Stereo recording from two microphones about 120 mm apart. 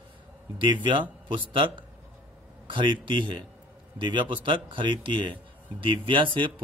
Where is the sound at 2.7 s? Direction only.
40° right (ahead or behind).